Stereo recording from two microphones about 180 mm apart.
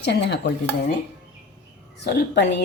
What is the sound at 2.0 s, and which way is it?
Speech, 65° left (ahead or behind).